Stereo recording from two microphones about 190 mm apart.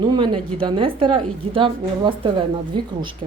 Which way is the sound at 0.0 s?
25° right (ahead or behind).